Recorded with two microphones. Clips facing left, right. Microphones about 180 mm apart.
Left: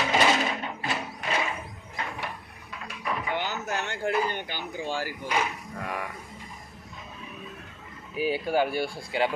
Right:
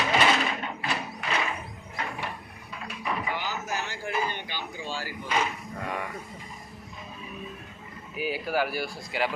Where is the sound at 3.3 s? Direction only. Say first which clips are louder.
Left 2 dB; 65° left (ahead or behind).